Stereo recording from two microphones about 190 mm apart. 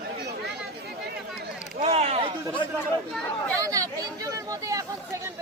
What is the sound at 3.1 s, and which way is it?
Speech, 5° left (ahead or behind).